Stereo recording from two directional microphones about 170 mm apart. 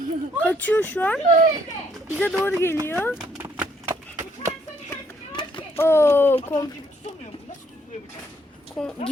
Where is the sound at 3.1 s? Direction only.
10° right (ahead or behind).